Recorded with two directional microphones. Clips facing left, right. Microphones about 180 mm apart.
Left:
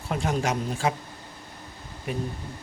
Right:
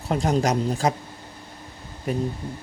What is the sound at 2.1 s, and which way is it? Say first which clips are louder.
Speech: right 5 dB; 40° right (ahead or behind).